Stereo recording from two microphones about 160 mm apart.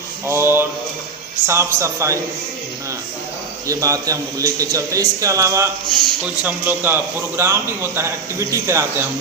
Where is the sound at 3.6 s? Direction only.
20° right (ahead or behind).